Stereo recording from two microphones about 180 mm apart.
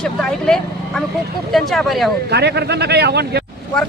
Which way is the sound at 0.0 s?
5° left (ahead or behind).